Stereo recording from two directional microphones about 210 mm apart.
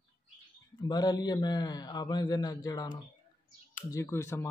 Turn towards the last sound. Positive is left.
turn(degrees=10)  # may be behind; listen again after turning